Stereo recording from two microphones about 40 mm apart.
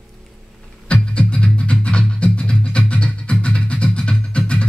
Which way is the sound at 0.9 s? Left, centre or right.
Left.